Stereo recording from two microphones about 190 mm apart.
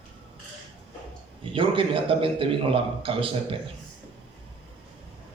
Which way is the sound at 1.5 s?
30° right (ahead or behind).